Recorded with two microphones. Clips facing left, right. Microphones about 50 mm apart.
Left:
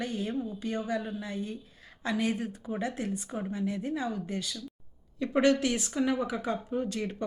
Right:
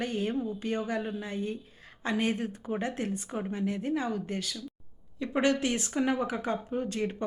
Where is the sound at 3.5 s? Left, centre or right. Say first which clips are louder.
Right 1 dB; right.